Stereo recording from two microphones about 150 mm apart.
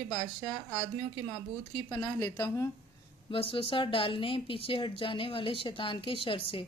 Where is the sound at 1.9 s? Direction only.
25° left (ahead or behind).